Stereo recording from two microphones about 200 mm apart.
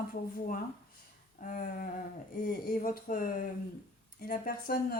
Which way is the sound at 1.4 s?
45° left (ahead or behind).